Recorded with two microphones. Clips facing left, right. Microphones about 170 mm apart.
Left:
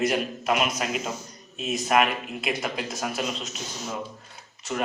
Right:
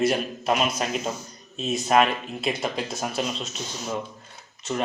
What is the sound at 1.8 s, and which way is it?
Speech, 30° right (ahead or behind).